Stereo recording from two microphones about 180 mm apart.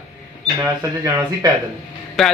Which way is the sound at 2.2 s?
Centre (ahead or behind).